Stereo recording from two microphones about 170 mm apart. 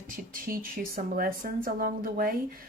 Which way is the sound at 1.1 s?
60° right (ahead or behind).